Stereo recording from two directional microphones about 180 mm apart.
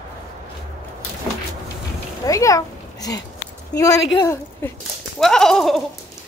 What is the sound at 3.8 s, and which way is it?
Speech, 20° left (ahead or behind).